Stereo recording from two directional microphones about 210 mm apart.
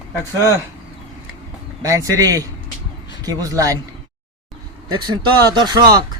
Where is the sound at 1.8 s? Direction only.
15° right (ahead or behind).